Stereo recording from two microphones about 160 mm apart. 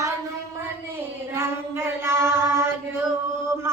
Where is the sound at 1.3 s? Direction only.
15° right (ahead or behind).